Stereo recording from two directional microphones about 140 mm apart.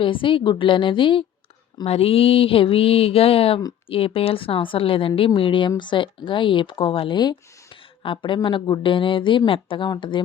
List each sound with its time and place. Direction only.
0.0 s speech: 40° left (ahead or behind)
1.8 s a sound: 45° left (ahead or behind)
3.8 s speech: 40° left (ahead or behind)